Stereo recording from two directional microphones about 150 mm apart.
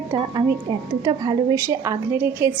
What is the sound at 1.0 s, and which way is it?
A woman's voice, 25° right (ahead or behind).